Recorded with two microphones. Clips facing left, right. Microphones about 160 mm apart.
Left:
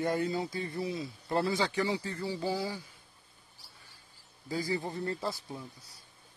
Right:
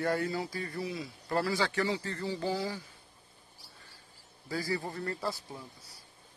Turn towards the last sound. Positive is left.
turn(degrees=20)  # may be behind; listen again after turning